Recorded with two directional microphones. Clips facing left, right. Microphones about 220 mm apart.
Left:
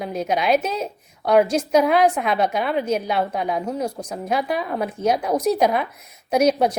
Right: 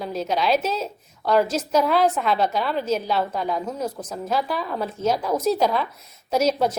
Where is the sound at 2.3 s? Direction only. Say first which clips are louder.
Left 2 dB; 55° left (ahead or behind).